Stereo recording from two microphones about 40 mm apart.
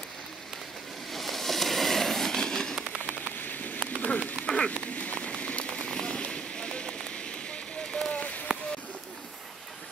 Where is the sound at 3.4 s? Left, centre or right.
Left.